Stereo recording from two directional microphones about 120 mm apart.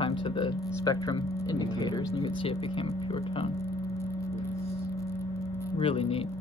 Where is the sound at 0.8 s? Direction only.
30° left (ahead or behind).